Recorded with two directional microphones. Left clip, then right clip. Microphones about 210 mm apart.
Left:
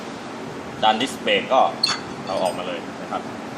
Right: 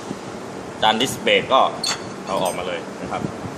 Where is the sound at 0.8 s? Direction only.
15° right (ahead or behind).